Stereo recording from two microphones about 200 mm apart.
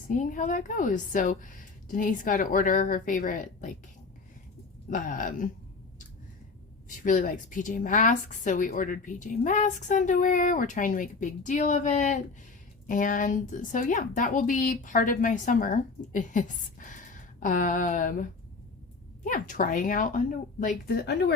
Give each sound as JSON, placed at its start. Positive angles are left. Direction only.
{"t": 0.1, "sound": "a woman's voice", "side_deg": 40}
{"t": 4.9, "sound": "a woman's voice", "side_deg": 40}
{"t": 7.0, "sound": "a woman's voice", "side_deg": 40}